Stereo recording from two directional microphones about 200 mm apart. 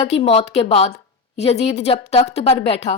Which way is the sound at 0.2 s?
30° left (ahead or behind).